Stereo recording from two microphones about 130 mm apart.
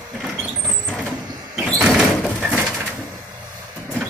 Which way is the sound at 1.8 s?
5° right (ahead or behind).